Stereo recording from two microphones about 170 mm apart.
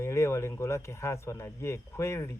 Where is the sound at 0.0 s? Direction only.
15° left (ahead or behind).